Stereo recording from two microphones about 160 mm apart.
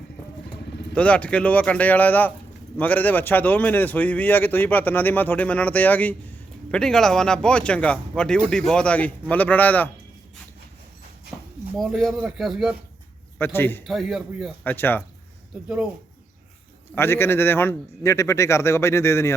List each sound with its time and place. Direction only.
0.9 s a man's voice: 10° left (ahead or behind)
11.8 s speech: centre (ahead or behind)
13.4 s a man's voice: 15° left (ahead or behind)
13.8 s speech: centre (ahead or behind)
14.6 s a man's voice: 10° left (ahead or behind)
15.5 s speech: 5° right (ahead or behind)
16.9 s a man's voice: 15° left (ahead or behind)